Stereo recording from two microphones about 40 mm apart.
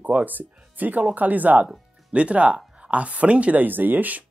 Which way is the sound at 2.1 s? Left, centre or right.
Right.